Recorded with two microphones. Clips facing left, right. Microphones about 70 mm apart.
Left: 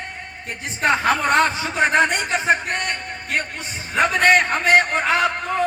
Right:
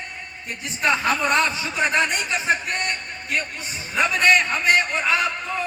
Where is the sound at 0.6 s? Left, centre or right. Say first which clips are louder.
Left 3 dB; left.